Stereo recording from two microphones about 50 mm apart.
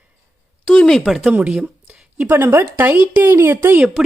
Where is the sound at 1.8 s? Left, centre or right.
Right.